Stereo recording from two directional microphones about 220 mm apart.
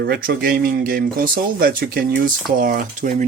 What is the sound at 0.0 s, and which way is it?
Speech, 45° right (ahead or behind).